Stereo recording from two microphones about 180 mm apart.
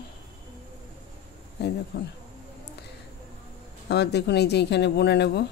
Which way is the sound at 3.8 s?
70° left (ahead or behind).